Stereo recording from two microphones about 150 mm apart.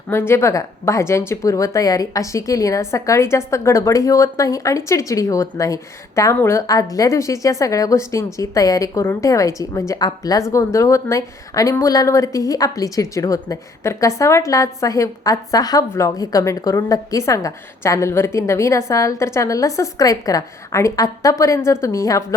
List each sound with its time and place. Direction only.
0.1 s a woman's voice: 15° left (ahead or behind)